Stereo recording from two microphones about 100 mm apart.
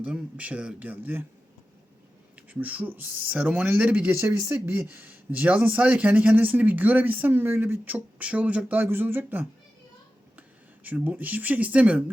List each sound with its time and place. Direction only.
0.0 s speech: 15° right (ahead or behind)
2.5 s speech: 15° right (ahead or behind)
10.8 s speech: 15° right (ahead or behind)